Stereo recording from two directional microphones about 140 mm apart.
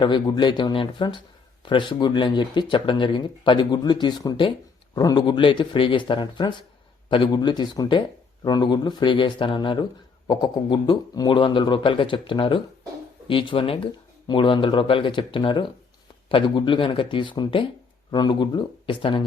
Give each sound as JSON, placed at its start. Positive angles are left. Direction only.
{"t": 0.0, "sound": "speech", "side_deg": 35}